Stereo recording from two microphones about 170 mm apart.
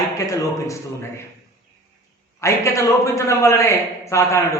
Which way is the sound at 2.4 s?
20° left (ahead or behind).